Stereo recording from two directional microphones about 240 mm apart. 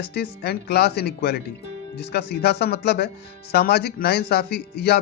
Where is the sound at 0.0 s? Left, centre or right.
Left.